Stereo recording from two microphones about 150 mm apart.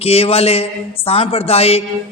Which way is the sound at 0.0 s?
40° left (ahead or behind).